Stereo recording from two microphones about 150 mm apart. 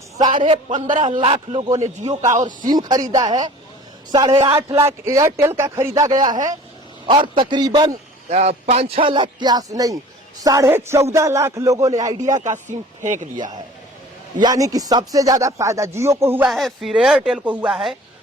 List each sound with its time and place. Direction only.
0.3 s a man's voice: 40° right (ahead or behind)
0.7 s a man's voice: 60° right (ahead or behind)
1.2 s a man's voice: 35° right (ahead or behind)
2.3 s a man's voice: 55° right (ahead or behind)
2.6 s speech: 25° right (ahead or behind)
7.1 s speech: 30° right (ahead or behind)
8.3 s a man's voice: 45° right (ahead or behind); by 12.3 s 25° right (ahead or behind)
12.3 s a man's voice: 55° right (ahead or behind)
13.3 s speech: 30° right (ahead or behind)
16.5 s speech: centre (ahead or behind)